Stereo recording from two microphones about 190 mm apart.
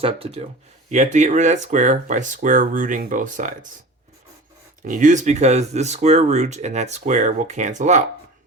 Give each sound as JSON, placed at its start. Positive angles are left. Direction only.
{"t": 0.0, "sound": "speech", "side_deg": -30}
{"t": 4.8, "sound": "speech", "side_deg": -40}